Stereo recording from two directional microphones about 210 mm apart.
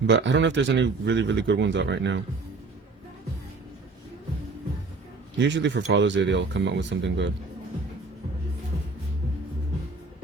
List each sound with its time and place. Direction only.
0.1 s a man's voice: 60° right (ahead or behind)
5.4 s a man's voice: 55° right (ahead or behind)